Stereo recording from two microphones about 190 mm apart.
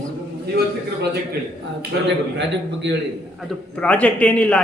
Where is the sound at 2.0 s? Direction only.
70° right (ahead or behind).